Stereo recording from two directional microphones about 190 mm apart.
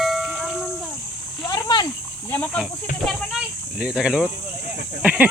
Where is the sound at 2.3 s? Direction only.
5° left (ahead or behind).